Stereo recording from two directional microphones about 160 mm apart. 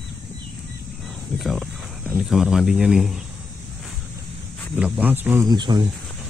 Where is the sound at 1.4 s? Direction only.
Centre (ahead or behind).